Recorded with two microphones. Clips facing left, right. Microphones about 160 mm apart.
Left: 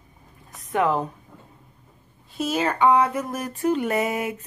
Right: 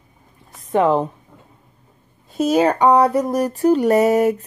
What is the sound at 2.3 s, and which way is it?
Speech, 40° right (ahead or behind).